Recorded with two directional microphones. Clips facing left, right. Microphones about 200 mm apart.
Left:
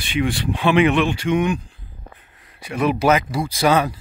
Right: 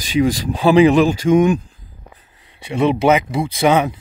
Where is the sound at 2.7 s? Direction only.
25° right (ahead or behind).